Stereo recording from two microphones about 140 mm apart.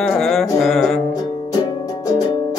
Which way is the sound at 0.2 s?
Centre (ahead or behind).